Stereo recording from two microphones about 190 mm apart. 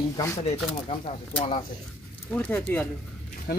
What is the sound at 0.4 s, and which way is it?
Speech, 30° left (ahead or behind).